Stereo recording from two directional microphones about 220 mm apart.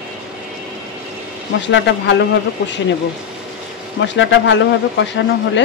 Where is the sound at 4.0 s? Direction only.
55° left (ahead or behind).